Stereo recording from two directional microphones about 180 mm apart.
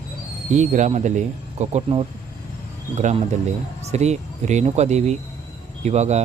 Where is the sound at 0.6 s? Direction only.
40° right (ahead or behind).